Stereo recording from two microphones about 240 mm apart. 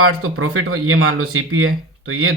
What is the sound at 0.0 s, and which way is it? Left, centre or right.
Speech, right.